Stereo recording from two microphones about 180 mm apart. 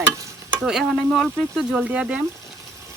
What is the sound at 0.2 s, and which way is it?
Stir, 15° right (ahead or behind).